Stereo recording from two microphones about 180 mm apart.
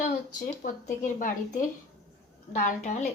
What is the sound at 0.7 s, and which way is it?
A woman's voice, 50° left (ahead or behind).